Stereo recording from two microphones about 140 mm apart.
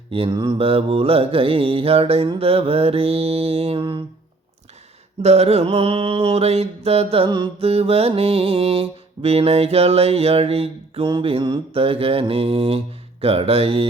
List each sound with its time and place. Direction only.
0.1 s mantra: 40° right (ahead or behind)
5.2 s mantra: 50° right (ahead or behind)
7.3 s mantra: 35° right (ahead or behind)